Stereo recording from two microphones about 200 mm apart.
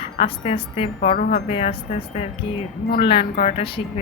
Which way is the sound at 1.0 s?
45° left (ahead or behind).